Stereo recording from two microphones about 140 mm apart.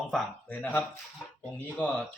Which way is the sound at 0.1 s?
10° left (ahead or behind).